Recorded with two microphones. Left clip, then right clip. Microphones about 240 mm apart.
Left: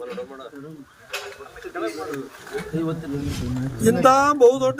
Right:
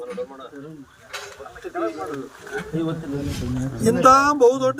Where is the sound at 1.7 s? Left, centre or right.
Right.